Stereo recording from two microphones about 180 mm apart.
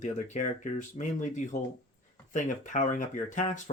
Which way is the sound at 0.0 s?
45° left (ahead or behind).